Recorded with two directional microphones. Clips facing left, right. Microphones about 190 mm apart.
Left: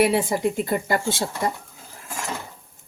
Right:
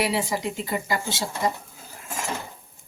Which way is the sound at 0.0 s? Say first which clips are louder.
Left 6 dB; 55° left (ahead or behind).